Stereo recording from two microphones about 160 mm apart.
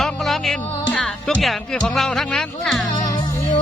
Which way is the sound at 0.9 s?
Centre (ahead or behind).